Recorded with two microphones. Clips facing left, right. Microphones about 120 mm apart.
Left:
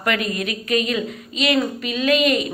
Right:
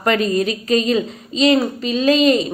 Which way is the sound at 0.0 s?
30° right (ahead or behind).